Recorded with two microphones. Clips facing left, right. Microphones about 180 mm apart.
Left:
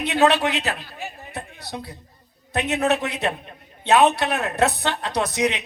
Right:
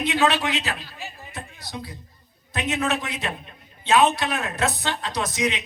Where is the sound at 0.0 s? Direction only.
60° left (ahead or behind).